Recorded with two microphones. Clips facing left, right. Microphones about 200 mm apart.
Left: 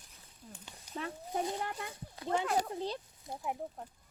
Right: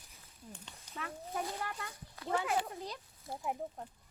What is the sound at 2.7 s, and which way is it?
Speech, 30° left (ahead or behind).